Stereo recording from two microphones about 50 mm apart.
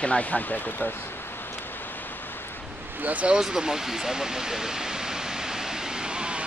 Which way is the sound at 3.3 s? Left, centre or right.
Centre.